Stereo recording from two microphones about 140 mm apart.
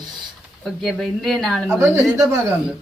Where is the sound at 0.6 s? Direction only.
Centre (ahead or behind).